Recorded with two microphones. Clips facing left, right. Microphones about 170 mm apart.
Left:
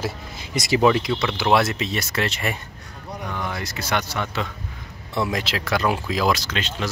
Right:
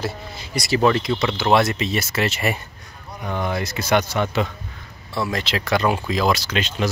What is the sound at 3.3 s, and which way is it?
Speech, 25° right (ahead or behind).